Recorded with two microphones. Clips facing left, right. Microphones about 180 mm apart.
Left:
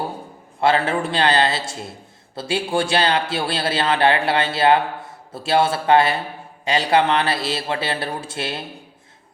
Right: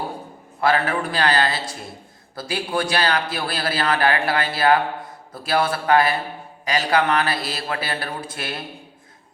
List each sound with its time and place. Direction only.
0.6 s a man's voice: 25° left (ahead or behind)